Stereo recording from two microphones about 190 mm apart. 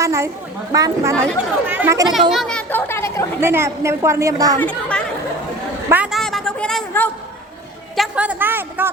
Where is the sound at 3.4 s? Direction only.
15° right (ahead or behind).